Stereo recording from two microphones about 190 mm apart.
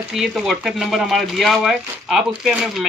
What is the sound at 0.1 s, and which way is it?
Speech, centre (ahead or behind).